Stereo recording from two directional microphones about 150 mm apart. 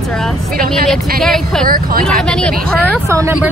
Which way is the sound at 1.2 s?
5° left (ahead or behind).